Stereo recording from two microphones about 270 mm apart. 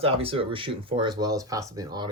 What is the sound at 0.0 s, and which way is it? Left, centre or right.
Speech, right.